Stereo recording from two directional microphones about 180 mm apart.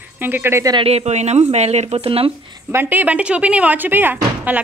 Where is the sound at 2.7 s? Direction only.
10° right (ahead or behind).